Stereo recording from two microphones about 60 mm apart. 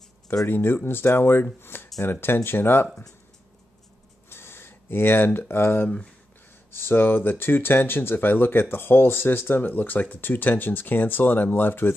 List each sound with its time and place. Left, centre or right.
0.5 s speech: left
4.3 s a sound: left
5.5 s speech: left